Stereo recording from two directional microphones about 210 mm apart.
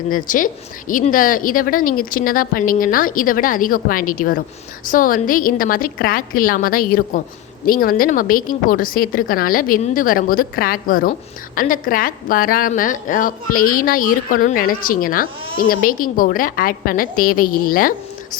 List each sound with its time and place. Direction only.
0.1 s a woman's voice: 40° left (ahead or behind)